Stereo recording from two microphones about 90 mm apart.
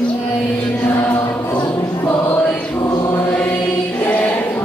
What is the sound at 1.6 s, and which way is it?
Choir, 30° left (ahead or behind).